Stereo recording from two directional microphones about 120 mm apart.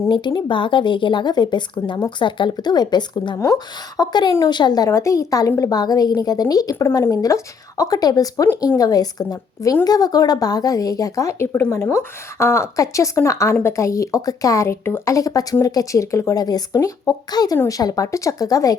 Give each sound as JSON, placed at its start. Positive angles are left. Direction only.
{"t": 0.3, "sound": "a woman's voice", "side_deg": 40}
{"t": 3.3, "sound": "a woman's voice", "side_deg": 25}